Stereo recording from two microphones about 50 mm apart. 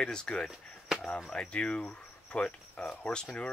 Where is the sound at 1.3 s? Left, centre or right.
Left.